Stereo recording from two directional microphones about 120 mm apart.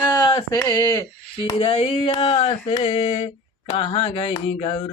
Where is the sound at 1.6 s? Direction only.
50° left (ahead or behind).